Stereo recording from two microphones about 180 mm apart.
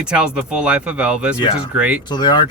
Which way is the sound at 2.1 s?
25° left (ahead or behind).